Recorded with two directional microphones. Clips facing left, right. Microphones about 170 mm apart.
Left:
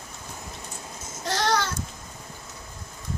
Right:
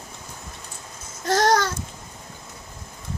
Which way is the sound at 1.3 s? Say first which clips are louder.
Right 6 dB; 45° right (ahead or behind).